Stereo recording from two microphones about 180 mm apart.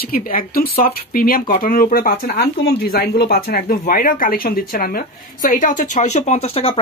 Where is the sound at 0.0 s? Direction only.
55° left (ahead or behind).